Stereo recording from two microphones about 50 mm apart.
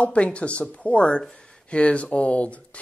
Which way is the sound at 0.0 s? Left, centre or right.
Left.